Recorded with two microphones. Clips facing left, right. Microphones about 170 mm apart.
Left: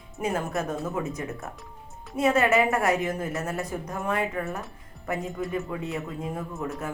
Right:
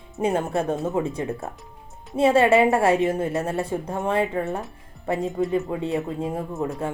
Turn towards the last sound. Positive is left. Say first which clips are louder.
# right 5 dB
turn(degrees=-30)  # may be behind; listen again after turning